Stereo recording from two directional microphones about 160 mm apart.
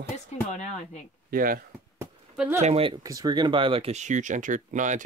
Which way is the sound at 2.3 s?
10° right (ahead or behind).